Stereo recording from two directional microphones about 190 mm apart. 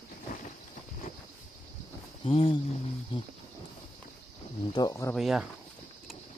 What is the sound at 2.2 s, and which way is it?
Speech, 30° left (ahead or behind).